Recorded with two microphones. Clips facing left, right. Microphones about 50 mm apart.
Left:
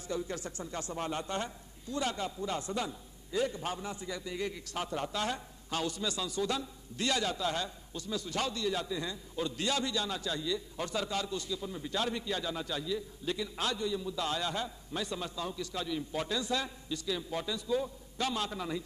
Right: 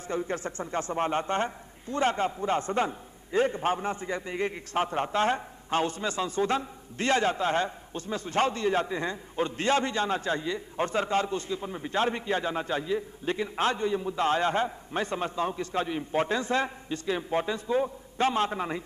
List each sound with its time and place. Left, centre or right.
0.1 s a man's voice: right